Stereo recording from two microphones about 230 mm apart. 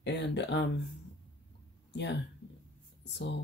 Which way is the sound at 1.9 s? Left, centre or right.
Left.